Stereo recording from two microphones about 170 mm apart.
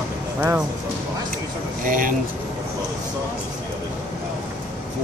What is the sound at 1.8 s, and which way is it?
Speech, 55° right (ahead or behind).